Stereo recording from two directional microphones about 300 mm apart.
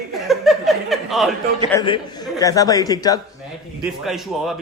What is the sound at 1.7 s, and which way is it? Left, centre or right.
Speech, centre.